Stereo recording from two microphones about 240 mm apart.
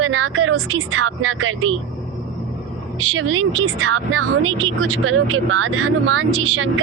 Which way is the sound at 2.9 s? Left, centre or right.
Right.